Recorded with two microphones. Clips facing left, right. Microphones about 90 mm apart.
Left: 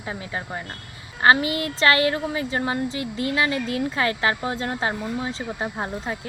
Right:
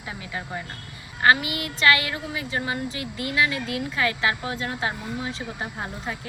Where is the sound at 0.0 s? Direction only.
35° left (ahead or behind).